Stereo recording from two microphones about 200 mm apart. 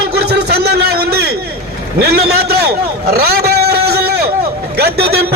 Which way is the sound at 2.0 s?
55° right (ahead or behind).